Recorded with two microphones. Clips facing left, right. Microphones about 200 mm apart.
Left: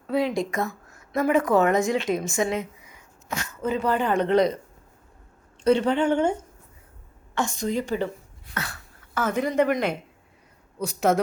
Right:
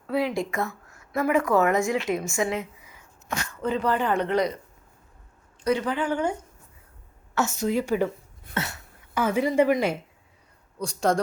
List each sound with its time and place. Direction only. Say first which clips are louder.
0.1 s a woman's voice: left 2 dB; 20° left (ahead or behind)
5.6 s a woman's voice: left 5 dB; 25° left (ahead or behind)
7.3 s speech: right 1 dB; 5° right (ahead or behind)
8.5 s cough: right 3 dB; 25° right (ahead or behind)
9.1 s speech: right 1 dB; 10° right (ahead or behind)
10.8 s speech: left 2 dB; 5° left (ahead or behind)